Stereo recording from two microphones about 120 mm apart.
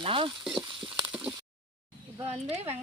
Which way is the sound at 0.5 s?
40° right (ahead or behind).